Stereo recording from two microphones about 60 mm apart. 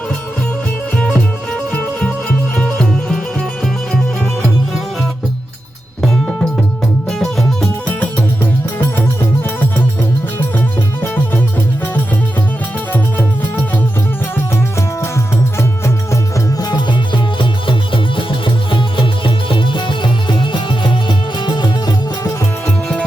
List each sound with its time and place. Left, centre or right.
0.9 s music: centre
6.0 s music: centre
8.8 s music: left
14.8 s music: left